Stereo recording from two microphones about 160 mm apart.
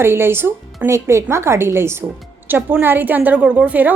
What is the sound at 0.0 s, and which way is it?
A woman's voice, 15° right (ahead or behind).